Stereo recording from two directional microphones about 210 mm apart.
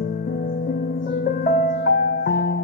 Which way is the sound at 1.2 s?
45° left (ahead or behind).